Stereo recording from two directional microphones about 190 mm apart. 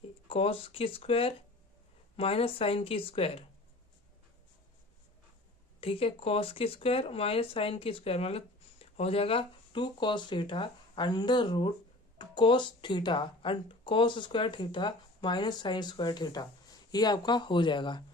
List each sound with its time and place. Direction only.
0.3 s speech: 30° left (ahead or behind)
5.8 s speech: 30° left (ahead or behind)